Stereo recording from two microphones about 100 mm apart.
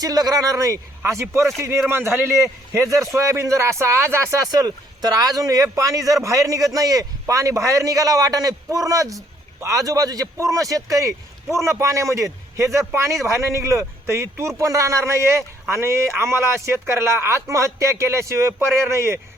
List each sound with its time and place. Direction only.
0.0 s a man's voice: 40° right (ahead or behind)